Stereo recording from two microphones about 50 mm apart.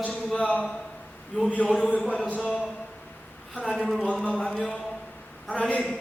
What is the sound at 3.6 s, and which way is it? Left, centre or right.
Speech, centre.